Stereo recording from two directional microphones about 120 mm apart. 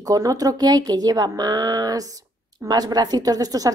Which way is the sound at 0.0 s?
30° right (ahead or behind).